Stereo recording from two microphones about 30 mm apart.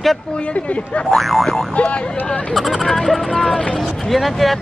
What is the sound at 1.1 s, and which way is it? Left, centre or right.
Speech, centre.